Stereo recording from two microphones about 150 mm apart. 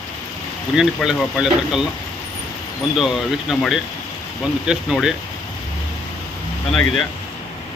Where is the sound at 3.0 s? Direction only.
Centre (ahead or behind).